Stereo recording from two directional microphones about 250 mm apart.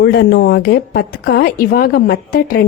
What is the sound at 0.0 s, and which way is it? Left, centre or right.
A woman's voice, left.